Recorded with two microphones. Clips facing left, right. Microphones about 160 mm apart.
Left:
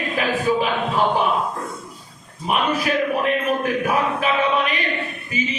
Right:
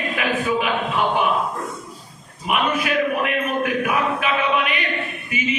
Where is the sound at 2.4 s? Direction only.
35° left (ahead or behind).